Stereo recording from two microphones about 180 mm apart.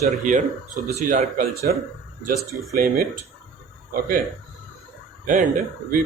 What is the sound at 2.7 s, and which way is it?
Speech, 55° right (ahead or behind).